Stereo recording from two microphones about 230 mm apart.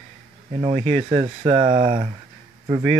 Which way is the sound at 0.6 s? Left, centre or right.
Right.